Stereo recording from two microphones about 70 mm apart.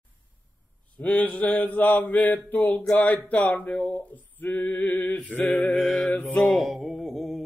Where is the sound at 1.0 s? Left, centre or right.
Left.